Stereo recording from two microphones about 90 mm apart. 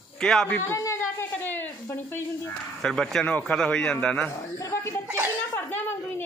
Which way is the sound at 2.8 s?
5° left (ahead or behind).